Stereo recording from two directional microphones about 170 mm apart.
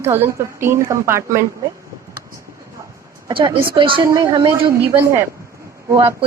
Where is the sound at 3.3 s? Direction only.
25° right (ahead or behind).